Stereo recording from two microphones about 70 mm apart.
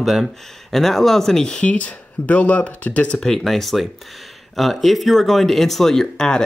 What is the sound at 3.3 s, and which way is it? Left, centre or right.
Speech, centre.